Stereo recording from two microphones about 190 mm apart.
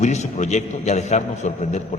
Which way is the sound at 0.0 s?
40° left (ahead or behind).